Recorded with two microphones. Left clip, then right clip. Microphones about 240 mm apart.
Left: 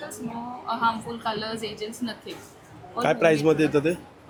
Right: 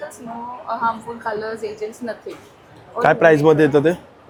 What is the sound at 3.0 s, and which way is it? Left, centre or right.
Speech, right.